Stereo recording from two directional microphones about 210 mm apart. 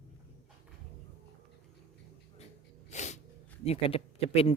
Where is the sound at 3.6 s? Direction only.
30° left (ahead or behind).